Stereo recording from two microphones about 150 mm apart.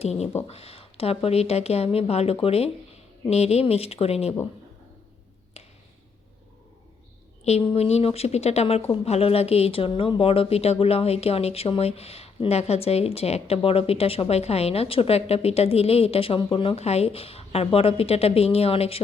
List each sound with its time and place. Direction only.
0.0 s speech: 45° left (ahead or behind)
5.6 s a sound: 45° left (ahead or behind)
7.4 s speech: 45° left (ahead or behind)